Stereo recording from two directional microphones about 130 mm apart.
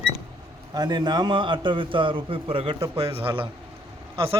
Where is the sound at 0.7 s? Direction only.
35° right (ahead or behind).